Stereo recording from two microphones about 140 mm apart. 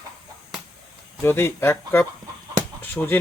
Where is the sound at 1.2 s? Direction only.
15° left (ahead or behind).